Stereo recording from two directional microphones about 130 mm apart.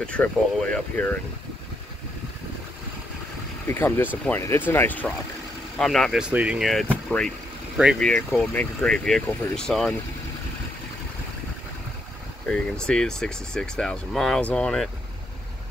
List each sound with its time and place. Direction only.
0.0 s speech: 10° left (ahead or behind)
3.6 s speech: 15° left (ahead or behind)
6.2 s speech: 10° right (ahead or behind)
6.7 s speech: 5° left (ahead or behind)
7.7 s speech: 5° right (ahead or behind)
8.4 s speech: 5° left (ahead or behind)
12.4 s speech: 5° left (ahead or behind)